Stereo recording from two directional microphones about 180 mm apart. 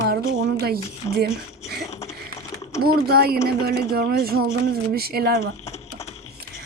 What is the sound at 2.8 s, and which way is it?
A woman's voice, 60° right (ahead or behind).